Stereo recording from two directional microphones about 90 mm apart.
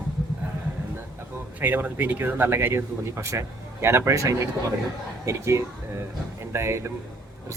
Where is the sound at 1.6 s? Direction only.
20° right (ahead or behind).